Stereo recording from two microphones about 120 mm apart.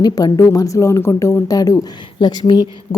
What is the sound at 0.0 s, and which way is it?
A woman's voice, 35° left (ahead or behind).